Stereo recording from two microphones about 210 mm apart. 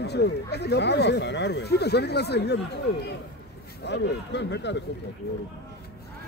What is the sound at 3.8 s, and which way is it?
Speech, 55° left (ahead or behind).